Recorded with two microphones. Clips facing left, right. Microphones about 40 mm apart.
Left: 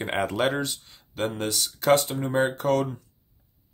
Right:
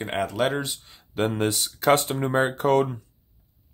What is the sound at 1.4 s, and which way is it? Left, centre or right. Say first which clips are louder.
Speech: right 2 dB; right.